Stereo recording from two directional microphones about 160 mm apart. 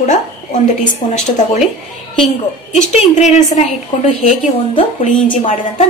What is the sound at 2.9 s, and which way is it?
A woman's voice, 45° left (ahead or behind).